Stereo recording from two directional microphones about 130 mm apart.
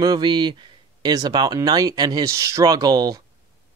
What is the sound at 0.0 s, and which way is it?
Speech, 35° right (ahead or behind).